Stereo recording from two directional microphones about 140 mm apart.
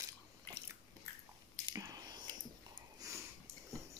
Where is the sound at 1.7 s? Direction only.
25° right (ahead or behind).